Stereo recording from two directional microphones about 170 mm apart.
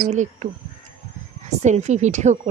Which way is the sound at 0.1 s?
45° right (ahead or behind).